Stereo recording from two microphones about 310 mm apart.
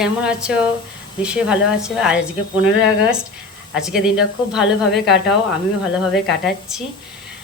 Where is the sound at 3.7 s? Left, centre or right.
Centre.